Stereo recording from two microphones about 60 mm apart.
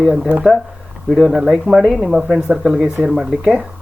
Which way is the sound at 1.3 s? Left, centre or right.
Centre.